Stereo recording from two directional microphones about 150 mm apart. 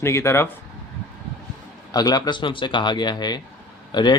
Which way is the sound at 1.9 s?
25° left (ahead or behind).